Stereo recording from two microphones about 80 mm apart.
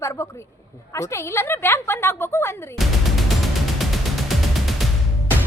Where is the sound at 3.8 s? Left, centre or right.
Centre.